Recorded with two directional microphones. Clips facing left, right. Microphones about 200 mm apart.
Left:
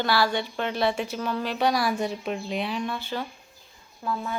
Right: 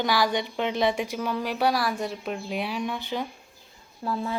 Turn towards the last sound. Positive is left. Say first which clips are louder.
# right 1 dB
turn(degrees=-30)  # may be behind; listen again after turning